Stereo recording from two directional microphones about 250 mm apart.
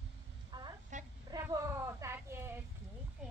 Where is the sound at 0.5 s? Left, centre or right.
Centre.